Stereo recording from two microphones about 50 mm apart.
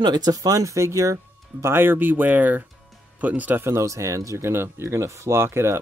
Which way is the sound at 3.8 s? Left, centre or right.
Right.